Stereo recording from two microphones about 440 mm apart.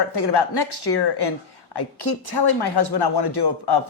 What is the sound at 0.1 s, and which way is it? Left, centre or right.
A woman's voice, left.